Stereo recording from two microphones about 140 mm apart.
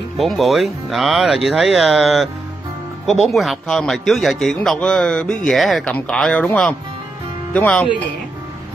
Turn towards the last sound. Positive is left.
turn(degrees=10)  # may be behind; listen again after turning